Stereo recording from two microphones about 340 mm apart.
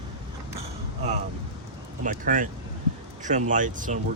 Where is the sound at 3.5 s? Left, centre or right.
Right.